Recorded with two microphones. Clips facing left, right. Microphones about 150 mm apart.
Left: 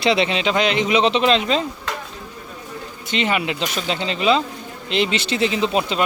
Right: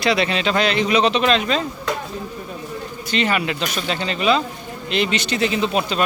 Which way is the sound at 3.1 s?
20° left (ahead or behind).